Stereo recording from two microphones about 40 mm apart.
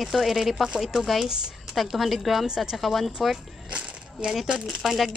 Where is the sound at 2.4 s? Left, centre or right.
Centre.